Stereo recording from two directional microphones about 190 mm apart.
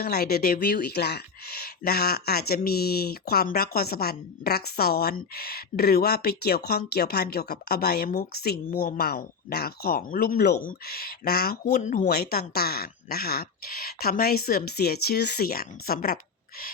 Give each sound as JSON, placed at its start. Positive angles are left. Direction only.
{"t": 0.0, "sound": "speech", "side_deg": 55}
{"t": 12.0, "sound": "speech", "side_deg": 55}